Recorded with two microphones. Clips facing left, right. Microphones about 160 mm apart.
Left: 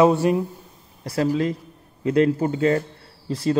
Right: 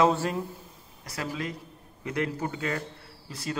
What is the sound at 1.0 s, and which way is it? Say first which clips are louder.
A man's voice: left 12 dB; 35° left (ahead or behind).